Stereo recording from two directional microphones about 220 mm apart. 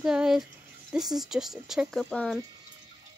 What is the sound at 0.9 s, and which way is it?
Speech, centre (ahead or behind).